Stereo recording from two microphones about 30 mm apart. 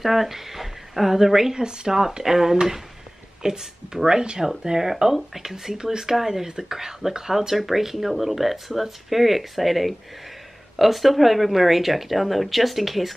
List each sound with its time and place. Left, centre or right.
0.0 s speech: centre
1.6 s speech: right
2.2 s speech: centre